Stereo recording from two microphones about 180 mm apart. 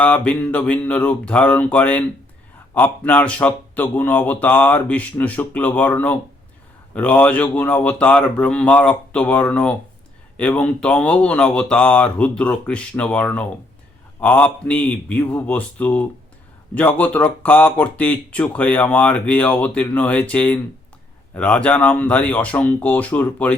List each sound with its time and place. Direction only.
0.0 s speech: 5° left (ahead or behind)